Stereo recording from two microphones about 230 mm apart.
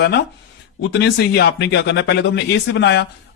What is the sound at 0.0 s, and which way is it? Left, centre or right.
Speech, left.